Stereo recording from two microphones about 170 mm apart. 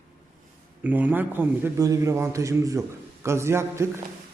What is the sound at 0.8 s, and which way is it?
Speech, 10° right (ahead or behind).